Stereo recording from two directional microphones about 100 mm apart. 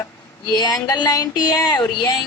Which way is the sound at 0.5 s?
45° left (ahead or behind).